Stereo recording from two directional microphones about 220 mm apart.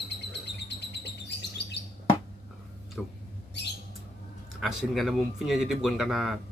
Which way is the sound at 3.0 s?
Centre (ahead or behind).